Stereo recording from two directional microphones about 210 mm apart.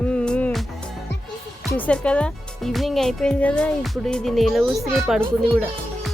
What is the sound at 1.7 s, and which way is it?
Speech, 5° left (ahead or behind).